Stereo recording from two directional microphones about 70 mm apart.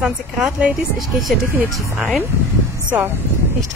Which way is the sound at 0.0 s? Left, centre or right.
Centre.